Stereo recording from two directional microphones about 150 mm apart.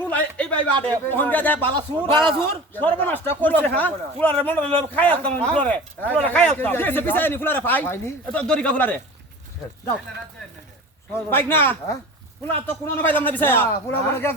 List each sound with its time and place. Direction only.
0.0 s a man's voice: 10° left (ahead or behind)
2.0 s speech: 35° right (ahead or behind)
2.4 s speech: 10° left (ahead or behind)
11.1 s speech: 15° left (ahead or behind)